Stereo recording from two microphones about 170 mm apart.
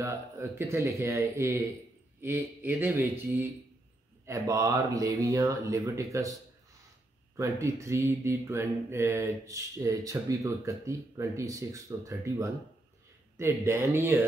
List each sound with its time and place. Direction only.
0.0 s speech: 15° right (ahead or behind)